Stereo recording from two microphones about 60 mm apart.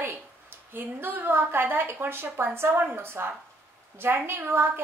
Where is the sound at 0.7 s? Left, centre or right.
Right.